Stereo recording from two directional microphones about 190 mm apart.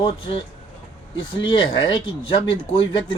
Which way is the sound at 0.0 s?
30° left (ahead or behind).